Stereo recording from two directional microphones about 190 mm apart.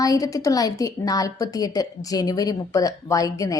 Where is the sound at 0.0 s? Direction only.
20° left (ahead or behind).